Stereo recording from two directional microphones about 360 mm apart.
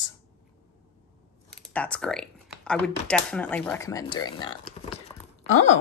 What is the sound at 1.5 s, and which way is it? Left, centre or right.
Speech, centre.